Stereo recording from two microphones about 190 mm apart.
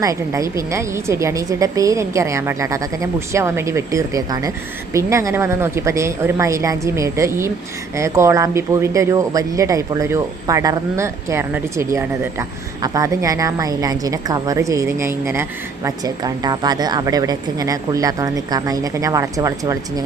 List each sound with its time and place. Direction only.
0.0 s speech: 15° right (ahead or behind)